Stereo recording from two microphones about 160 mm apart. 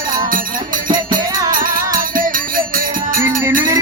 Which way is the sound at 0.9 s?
60° right (ahead or behind).